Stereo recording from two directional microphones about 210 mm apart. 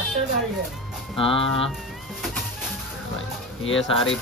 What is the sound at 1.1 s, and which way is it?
Speech, 25° left (ahead or behind).